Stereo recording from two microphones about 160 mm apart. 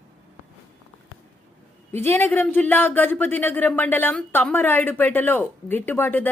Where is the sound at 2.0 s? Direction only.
15° left (ahead or behind).